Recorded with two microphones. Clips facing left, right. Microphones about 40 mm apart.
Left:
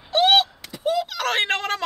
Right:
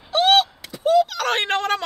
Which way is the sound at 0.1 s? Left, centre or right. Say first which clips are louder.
Right 1 dB; centre.